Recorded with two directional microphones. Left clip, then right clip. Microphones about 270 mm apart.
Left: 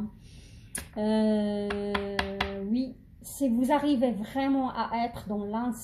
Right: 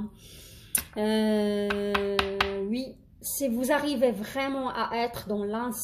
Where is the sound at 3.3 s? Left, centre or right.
Right.